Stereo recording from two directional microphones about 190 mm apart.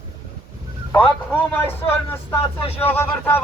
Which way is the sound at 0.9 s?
10° left (ahead or behind).